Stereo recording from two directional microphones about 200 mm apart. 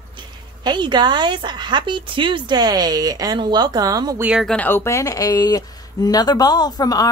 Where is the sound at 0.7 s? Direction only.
20° right (ahead or behind).